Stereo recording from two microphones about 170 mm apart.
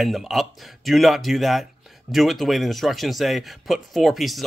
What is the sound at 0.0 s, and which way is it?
Speech, centre (ahead or behind).